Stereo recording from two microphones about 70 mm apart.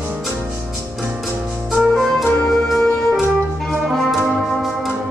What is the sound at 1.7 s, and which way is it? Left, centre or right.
Music, centre.